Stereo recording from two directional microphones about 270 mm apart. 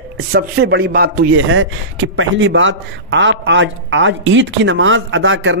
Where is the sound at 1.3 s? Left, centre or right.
Right.